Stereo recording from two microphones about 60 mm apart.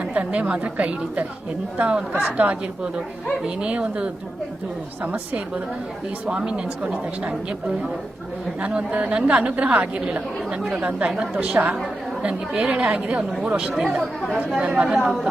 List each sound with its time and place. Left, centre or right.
0.0 s a woman's voice: right
6.2 s speech: centre
8.6 s a woman's voice: right
14.6 s a woman's voice: right